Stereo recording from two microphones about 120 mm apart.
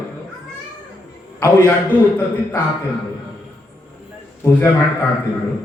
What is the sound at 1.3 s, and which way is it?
A man's voice, 20° left (ahead or behind).